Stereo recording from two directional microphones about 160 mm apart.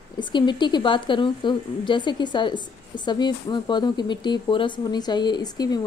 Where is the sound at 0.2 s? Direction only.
30° left (ahead or behind).